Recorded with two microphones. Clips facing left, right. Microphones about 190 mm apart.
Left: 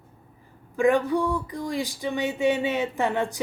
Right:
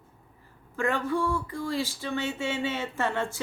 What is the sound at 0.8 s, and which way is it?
Speech, 15° left (ahead or behind).